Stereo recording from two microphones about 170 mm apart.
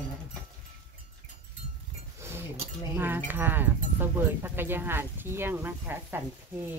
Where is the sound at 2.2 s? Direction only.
15° right (ahead or behind).